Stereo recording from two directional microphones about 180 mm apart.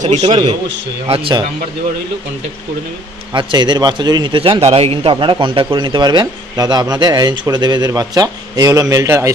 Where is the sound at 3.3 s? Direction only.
25° right (ahead or behind).